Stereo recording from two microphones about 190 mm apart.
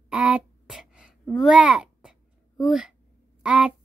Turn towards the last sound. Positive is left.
turn(degrees=-5)  # may be behind; listen again after turning